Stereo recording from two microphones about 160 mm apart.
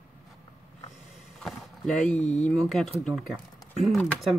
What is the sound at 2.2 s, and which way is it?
Speech, 45° left (ahead or behind).